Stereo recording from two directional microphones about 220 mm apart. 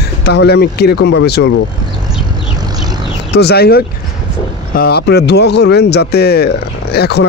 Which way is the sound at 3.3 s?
45° left (ahead or behind).